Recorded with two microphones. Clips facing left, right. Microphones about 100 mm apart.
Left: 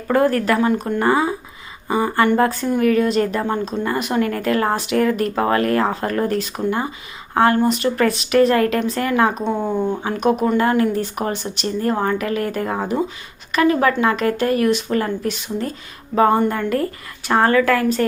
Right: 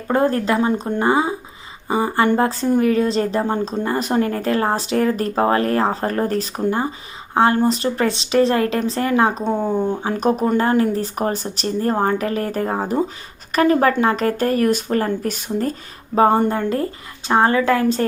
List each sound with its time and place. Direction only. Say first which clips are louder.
0.1 s speech: left 1 dB; 25° right (ahead or behind)
7.6 s speech: left 1 dB; 30° right (ahead or behind)
9.4 s speech: right 1 dB; 15° right (ahead or behind)
10.1 s speech: left 1 dB; 35° right (ahead or behind)
16.1 s speech: even; 30° right (ahead or behind)